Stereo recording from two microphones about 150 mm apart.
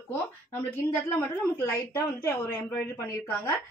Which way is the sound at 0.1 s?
15° left (ahead or behind).